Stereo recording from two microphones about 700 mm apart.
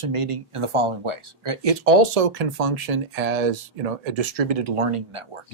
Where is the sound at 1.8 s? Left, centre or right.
Right.